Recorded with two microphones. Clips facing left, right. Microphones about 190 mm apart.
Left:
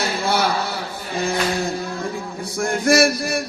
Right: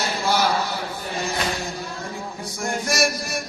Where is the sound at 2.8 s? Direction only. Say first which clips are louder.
Left 10 dB; 60° left (ahead or behind).